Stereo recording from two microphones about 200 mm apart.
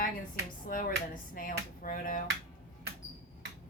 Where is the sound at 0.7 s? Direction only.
45° left (ahead or behind).